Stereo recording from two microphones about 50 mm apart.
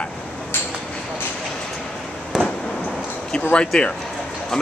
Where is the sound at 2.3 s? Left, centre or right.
Centre.